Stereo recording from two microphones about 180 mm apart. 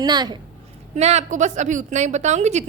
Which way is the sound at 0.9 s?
40° right (ahead or behind).